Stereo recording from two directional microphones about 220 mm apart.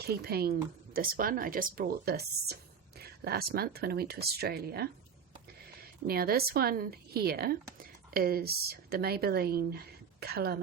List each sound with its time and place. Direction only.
0.0 s a woman's voice: 45° right (ahead or behind)